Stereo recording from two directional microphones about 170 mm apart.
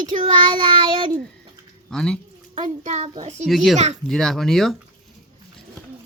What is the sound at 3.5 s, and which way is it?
Speech, centre (ahead or behind).